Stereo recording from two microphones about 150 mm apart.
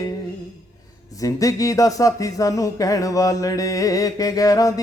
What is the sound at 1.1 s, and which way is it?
Speech, 25° left (ahead or behind).